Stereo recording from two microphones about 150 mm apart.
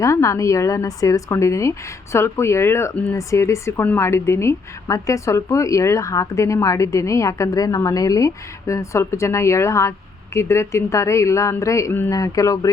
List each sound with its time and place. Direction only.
0.0 s speech: 20° left (ahead or behind)